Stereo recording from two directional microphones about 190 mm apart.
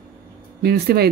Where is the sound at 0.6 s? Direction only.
55° right (ahead or behind).